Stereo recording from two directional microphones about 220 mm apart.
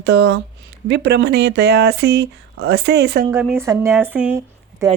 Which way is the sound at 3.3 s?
5° right (ahead or behind).